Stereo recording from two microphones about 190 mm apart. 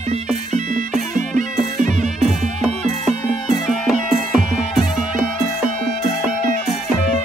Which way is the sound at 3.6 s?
Centre (ahead or behind).